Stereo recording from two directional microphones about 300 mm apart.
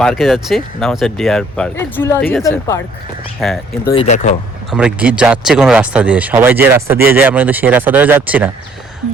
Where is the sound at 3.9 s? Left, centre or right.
Left.